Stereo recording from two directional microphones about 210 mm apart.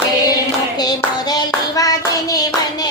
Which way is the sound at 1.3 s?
15° left (ahead or behind).